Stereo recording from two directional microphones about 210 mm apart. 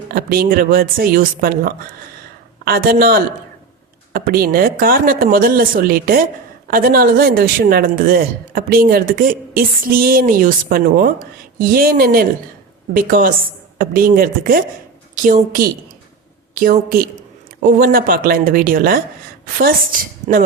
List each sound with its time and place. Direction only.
0.1 s a man's voice: 45° right (ahead or behind)